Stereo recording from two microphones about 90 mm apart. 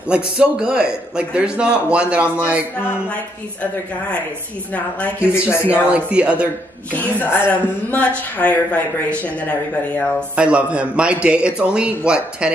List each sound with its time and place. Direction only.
0.1 s a man's voice: 10° right (ahead or behind)
5.3 s a woman's voice: 30° left (ahead or behind)
5.7 s a man's voice: 15° right (ahead or behind)
7.0 s a woman's voice: 20° left (ahead or behind)
10.3 s a man's voice: 15° right (ahead or behind)